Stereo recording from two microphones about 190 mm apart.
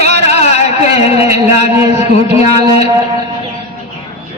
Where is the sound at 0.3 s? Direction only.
35° left (ahead or behind).